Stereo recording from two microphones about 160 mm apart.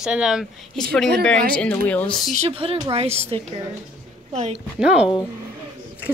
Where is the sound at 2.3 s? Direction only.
40° right (ahead or behind).